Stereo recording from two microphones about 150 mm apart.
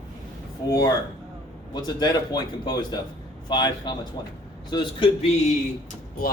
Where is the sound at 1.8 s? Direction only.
30° left (ahead or behind).